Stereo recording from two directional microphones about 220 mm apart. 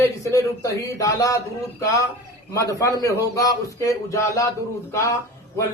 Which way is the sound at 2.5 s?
15° left (ahead or behind).